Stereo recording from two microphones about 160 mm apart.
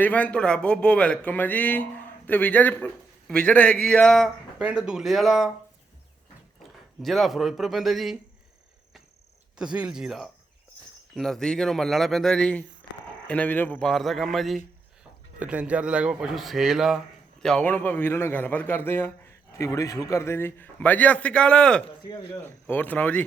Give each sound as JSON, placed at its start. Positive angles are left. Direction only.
{"t": 0.0, "sound": "speech", "side_deg": 10}
{"t": 6.6, "sound": "speech", "side_deg": 0}
{"t": 9.6, "sound": "speech", "side_deg": -5}
{"t": 22.0, "sound": "a man's voice", "side_deg": 25}
{"t": 22.4, "sound": "speech", "side_deg": 10}